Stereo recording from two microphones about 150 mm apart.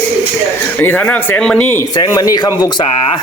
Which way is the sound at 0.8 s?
10° left (ahead or behind).